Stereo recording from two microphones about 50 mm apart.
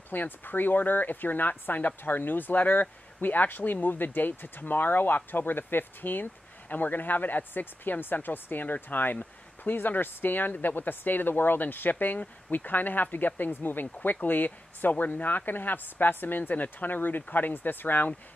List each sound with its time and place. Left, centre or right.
0.1 s speech: left